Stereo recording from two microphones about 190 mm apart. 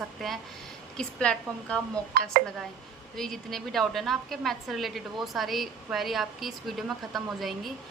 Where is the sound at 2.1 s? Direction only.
50° right (ahead or behind).